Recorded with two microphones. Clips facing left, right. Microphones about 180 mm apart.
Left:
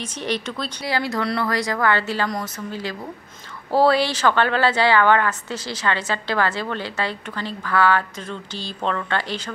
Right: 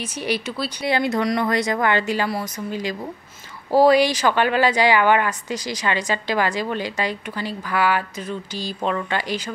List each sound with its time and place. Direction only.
0.0 s a woman's voice: 10° right (ahead or behind)
0.8 s a woman's voice: 20° right (ahead or behind)